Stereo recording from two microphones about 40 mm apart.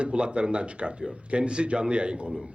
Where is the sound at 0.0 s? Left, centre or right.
Right.